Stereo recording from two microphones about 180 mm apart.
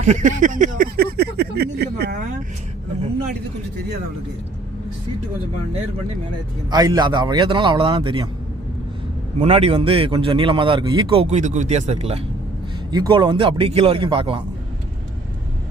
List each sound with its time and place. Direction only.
0.0 s speech: 45° right (ahead or behind); by 2.1 s 60° right (ahead or behind)
6.7 s speech: 20° right (ahead or behind)
9.4 s a man's voice: 35° right (ahead or behind)
12.9 s speech: 25° right (ahead or behind)